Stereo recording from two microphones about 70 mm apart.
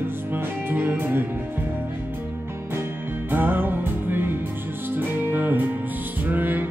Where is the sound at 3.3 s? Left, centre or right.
Right.